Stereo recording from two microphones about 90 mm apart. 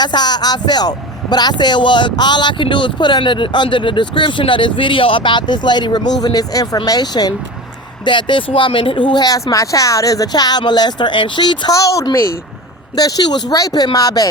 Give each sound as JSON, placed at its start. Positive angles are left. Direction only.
{"t": 0.0, "sound": "speech", "side_deg": 50}
{"t": 8.0, "sound": "speech", "side_deg": 65}
{"t": 9.2, "sound": "speech", "side_deg": 40}
{"t": 11.7, "sound": "speech", "side_deg": 40}